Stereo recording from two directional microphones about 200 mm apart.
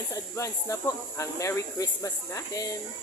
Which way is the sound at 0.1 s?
15° left (ahead or behind).